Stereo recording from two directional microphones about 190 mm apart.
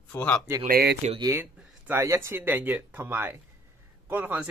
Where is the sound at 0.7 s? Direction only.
50° right (ahead or behind).